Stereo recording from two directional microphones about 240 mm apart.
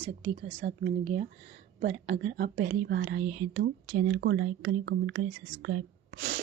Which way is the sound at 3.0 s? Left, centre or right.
Right.